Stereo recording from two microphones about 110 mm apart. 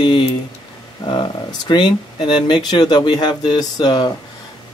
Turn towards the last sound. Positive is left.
turn(degrees=40)  # may be behind; listen again after turning